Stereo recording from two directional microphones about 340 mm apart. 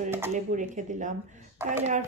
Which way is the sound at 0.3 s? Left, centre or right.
Right.